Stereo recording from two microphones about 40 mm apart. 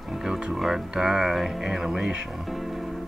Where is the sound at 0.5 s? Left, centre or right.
Centre.